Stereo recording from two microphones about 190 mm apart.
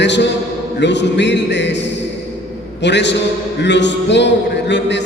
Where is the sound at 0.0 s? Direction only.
65° left (ahead or behind).